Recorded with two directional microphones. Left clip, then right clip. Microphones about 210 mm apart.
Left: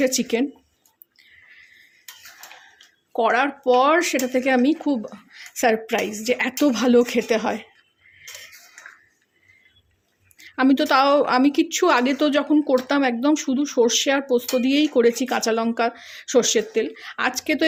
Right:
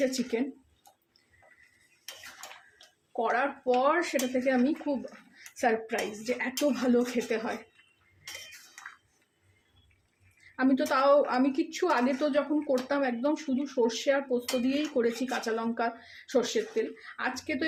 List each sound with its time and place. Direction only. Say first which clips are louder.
0.0 s a woman's voice: left 8 dB; 45° left (ahead or behind)
3.2 s a woman's voice: left 9 dB; 40° left (ahead or behind)
10.5 s a woman's voice: left 9 dB; 45° left (ahead or behind)